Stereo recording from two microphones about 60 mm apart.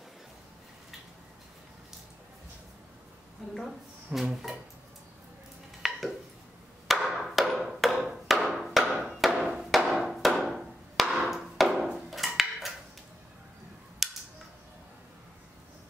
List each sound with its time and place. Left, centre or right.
3.5 s speech: centre
5.8 s a sound: centre
9.4 s music: centre
9.8 s wood block: centre
12.4 s a sound: centre
14.0 s cap gun: centre